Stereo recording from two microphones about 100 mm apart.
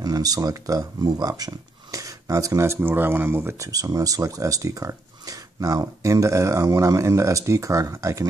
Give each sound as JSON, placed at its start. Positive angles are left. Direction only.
{"t": 0.0, "sound": "speech", "side_deg": -40}